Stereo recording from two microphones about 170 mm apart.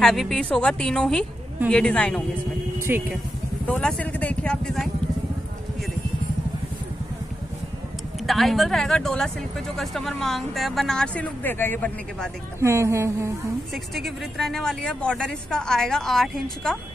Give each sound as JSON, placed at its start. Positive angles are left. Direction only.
{"t": 0.0, "sound": "speech", "side_deg": 0}
{"t": 2.8, "sound": "speech", "side_deg": -10}
{"t": 3.6, "sound": "speech", "side_deg": 10}
{"t": 8.3, "sound": "speech", "side_deg": 0}
{"t": 12.5, "sound": "a woman's voice", "side_deg": -15}
{"t": 13.9, "sound": "speech", "side_deg": 0}